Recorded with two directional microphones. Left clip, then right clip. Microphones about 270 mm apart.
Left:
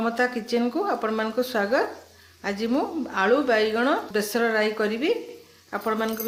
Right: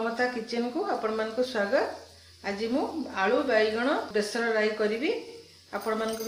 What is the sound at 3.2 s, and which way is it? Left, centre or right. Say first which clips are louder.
Speech: left 4 dB; left.